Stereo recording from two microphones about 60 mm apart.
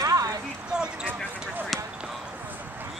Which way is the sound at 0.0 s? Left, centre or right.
Right.